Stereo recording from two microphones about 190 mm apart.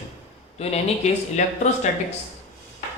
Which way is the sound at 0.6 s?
35° left (ahead or behind).